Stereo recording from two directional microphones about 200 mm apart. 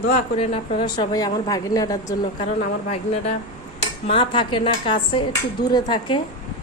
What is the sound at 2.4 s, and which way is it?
A woman's voice, 30° left (ahead or behind).